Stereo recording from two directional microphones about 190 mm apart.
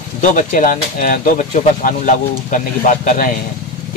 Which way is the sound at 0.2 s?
40° left (ahead or behind).